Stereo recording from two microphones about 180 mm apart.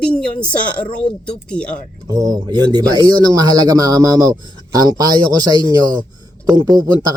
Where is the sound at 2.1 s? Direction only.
20° right (ahead or behind).